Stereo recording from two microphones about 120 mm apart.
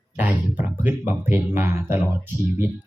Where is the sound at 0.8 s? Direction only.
15° right (ahead or behind).